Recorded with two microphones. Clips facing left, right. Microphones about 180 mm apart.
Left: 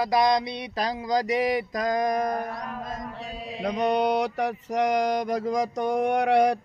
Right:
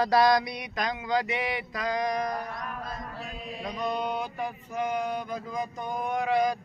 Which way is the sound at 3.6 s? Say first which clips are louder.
Left 8 dB; 75° left (ahead or behind).